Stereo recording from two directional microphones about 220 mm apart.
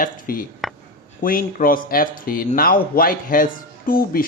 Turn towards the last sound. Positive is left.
turn(degrees=40)  # may be behind; listen again after turning